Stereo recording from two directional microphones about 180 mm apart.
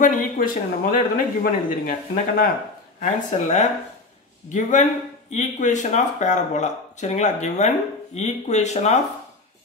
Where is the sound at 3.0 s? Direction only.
40° left (ahead or behind).